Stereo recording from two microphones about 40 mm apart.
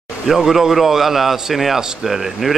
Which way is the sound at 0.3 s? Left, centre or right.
Centre.